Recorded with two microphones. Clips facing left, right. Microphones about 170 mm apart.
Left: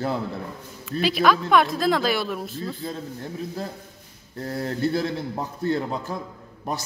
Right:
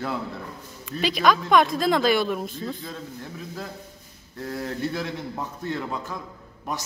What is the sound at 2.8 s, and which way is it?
Speech, 35° left (ahead or behind).